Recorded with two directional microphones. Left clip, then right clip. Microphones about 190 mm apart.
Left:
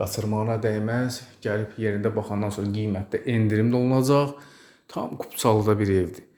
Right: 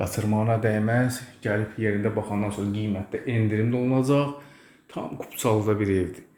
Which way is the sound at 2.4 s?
45° left (ahead or behind).